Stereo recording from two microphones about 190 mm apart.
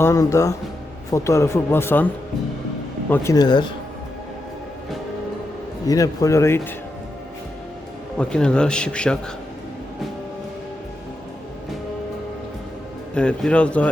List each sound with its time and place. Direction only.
0.0 s speech: 15° left (ahead or behind)
3.1 s speech: 15° left (ahead or behind)
5.9 s speech: 15° left (ahead or behind)
8.2 s speech: 5° left (ahead or behind)
13.1 s speech: 5° left (ahead or behind)